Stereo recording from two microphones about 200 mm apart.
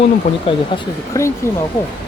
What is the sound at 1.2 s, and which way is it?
Speech, 15° left (ahead or behind).